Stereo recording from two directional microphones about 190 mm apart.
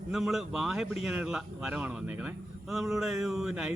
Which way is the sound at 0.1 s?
Centre (ahead or behind).